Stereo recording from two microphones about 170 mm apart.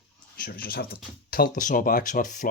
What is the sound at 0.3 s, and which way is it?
Speech, 60° left (ahead or behind).